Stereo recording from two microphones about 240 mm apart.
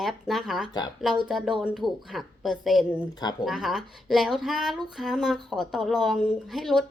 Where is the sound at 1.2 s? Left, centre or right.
Centre.